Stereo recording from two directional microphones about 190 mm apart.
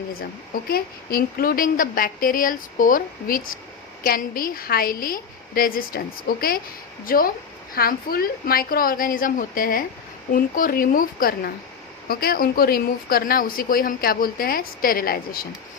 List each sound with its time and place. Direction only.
0.7 s a woman's voice: 50° left (ahead or behind)